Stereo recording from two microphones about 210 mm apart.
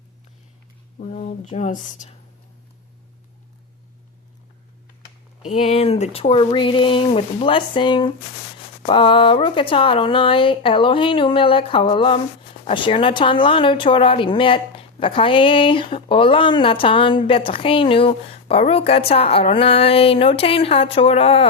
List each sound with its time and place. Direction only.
0.9 s speech: 35° left (ahead or behind)
5.5 s speech: 30° left (ahead or behind)